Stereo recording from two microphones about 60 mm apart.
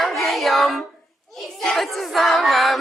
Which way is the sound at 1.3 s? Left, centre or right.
Centre.